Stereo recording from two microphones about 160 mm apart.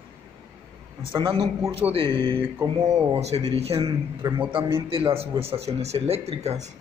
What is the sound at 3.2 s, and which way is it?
Speech, 40° right (ahead or behind).